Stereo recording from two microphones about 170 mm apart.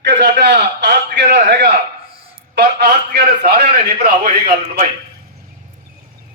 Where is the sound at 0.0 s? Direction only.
90° right; by 4.8 s 60° right (ahead or behind).